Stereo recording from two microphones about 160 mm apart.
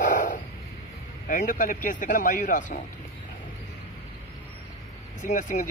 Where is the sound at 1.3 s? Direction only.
55° left (ahead or behind).